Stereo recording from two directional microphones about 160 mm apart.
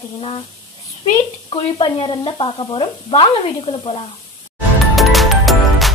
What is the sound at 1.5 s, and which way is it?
Speech, 30° left (ahead or behind).